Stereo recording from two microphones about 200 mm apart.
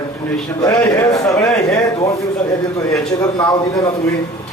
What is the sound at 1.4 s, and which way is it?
Speech, 5° left (ahead or behind).